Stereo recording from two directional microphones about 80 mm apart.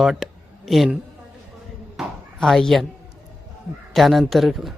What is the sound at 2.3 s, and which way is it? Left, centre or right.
Speech, centre.